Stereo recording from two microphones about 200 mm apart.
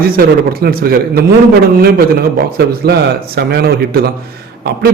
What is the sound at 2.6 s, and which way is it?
Speech, 50° right (ahead or behind).